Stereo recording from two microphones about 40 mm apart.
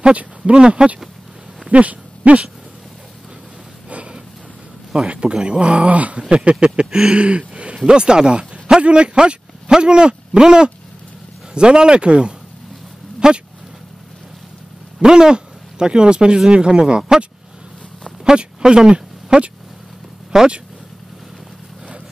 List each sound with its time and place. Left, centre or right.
0.1 s speech: right
0.6 s speech: right
1.7 s speech: right
3.9 s a sound: right
5.0 s speech: right
6.2 s speech: right
13.2 s speech: centre
15.0 s speech: centre